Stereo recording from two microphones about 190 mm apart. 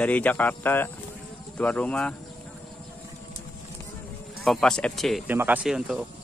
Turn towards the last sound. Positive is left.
turn(degrees=-5)  # may be behind; listen again after turning